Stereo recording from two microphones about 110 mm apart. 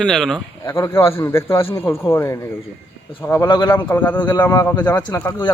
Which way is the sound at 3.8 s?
15° left (ahead or behind).